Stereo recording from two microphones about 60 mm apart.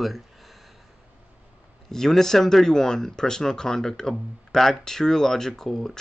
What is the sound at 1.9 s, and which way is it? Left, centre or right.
Speech, centre.